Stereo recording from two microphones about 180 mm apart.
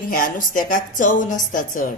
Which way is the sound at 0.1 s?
50° left (ahead or behind).